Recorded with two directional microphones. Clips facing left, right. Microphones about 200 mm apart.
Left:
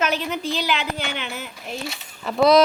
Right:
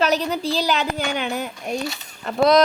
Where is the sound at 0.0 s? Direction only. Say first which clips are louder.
Right 3 dB; 35° right (ahead or behind).